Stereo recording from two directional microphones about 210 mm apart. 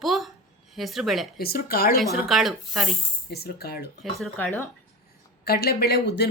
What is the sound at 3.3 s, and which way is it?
Speech, 50° left (ahead or behind).